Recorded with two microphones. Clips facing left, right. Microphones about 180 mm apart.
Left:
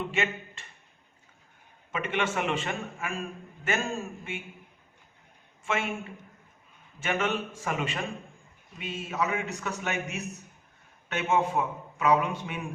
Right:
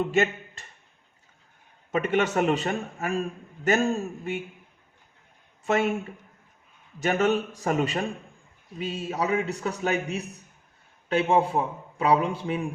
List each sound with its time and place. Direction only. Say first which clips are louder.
0.1 s speech: right 7 dB; 40° right (ahead or behind)
1.9 s a man's voice: right 6 dB; 40° right (ahead or behind)
5.6 s a man's voice: right 7 dB; 40° right (ahead or behind)
7.0 s a man's voice: right 6 dB; 40° right (ahead or behind)